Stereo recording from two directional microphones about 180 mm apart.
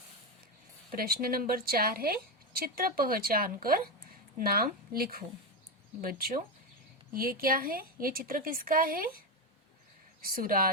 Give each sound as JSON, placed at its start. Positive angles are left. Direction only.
{"t": 0.9, "sound": "a woman's voice", "side_deg": -55}